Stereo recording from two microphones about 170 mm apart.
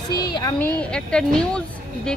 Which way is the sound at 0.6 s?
5° left (ahead or behind).